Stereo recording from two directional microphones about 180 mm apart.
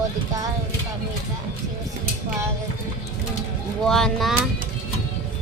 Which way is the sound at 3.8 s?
5° left (ahead or behind).